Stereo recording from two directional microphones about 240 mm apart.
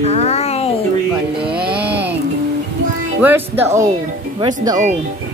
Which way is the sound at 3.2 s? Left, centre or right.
Centre.